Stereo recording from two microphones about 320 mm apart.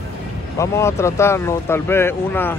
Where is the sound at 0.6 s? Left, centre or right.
Centre.